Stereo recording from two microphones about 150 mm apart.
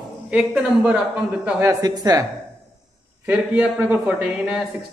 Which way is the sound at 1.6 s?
20° right (ahead or behind).